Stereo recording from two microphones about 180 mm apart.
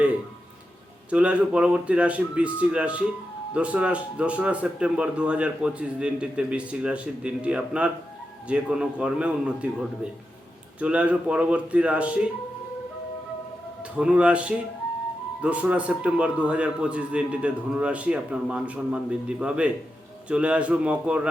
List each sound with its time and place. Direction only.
1.1 s speech: 5° right (ahead or behind)
13.9 s speech: 5° right (ahead or behind)